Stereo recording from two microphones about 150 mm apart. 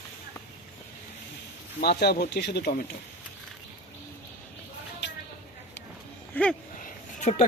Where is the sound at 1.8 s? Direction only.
90° left.